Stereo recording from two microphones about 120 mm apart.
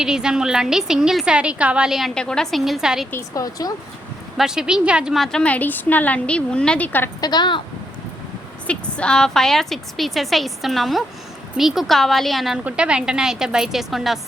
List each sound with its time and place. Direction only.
0.0 s a woman's voice: 5° right (ahead or behind)
3.1 s speech: 25° left (ahead or behind)
4.4 s a woman's voice: 5° right (ahead or behind); by 7.1 s 15° left (ahead or behind)
7.2 s speech: 35° left (ahead or behind)
8.6 s a woman's voice: 10° left (ahead or behind)